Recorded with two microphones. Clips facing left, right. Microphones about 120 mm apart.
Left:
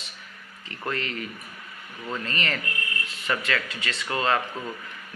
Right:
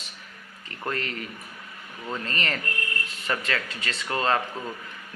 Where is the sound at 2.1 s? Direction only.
35° right (ahead or behind).